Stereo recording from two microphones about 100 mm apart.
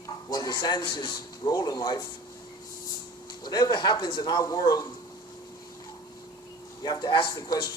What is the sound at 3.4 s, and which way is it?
A man's voice, 45° left (ahead or behind).